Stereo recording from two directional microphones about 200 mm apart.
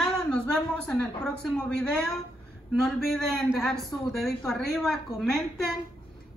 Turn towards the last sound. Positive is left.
turn(degrees=0)  # may be behind; listen again after turning